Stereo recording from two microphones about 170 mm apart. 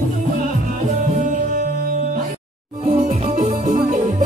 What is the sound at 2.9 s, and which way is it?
Music, 40° right (ahead or behind).